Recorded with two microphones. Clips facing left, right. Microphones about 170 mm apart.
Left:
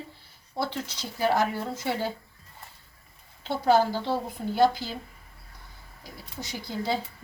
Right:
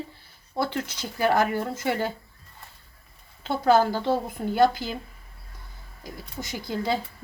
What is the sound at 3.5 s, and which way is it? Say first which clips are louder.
Speech: right 2 dB; 50° right (ahead or behind).